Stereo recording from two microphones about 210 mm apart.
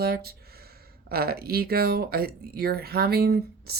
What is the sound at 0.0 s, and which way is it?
Speech, 50° right (ahead or behind).